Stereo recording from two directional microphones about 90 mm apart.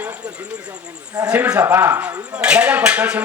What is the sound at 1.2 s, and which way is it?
Speech, 15° right (ahead or behind).